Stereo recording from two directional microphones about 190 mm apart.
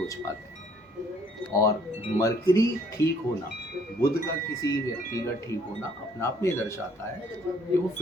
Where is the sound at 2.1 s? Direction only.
15° left (ahead or behind).